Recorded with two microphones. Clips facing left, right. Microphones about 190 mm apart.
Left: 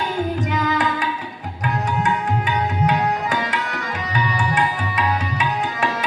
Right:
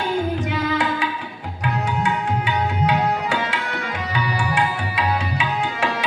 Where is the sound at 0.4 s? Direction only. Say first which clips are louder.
Left 1 dB; 40° left (ahead or behind).